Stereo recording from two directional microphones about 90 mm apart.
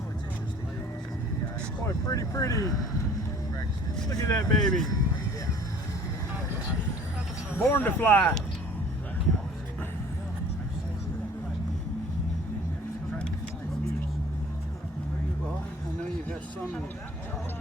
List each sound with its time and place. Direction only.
2.0 s speech: 35° left (ahead or behind)
4.1 s speech: 35° left (ahead or behind)
4.6 s speech: 5° left (ahead or behind)
7.5 s speech: 20° left (ahead or behind)